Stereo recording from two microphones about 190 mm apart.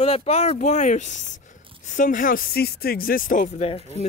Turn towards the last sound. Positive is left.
turn(degrees=35)  # may be behind; listen again after turning